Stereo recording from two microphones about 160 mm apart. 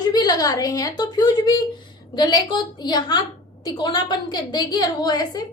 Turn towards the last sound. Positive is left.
turn(degrees=25)  # may be behind; listen again after turning